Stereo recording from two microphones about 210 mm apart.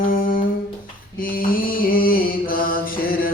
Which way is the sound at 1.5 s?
45° left (ahead or behind).